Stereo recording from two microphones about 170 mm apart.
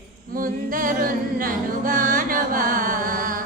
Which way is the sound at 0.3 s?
55° right (ahead or behind).